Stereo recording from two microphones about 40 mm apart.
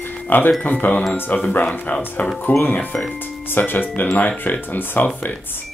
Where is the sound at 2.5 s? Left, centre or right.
Left.